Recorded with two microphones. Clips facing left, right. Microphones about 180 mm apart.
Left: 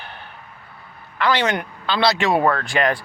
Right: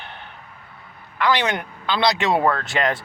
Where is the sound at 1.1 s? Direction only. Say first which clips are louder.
Left 1 dB; 15° right (ahead or behind).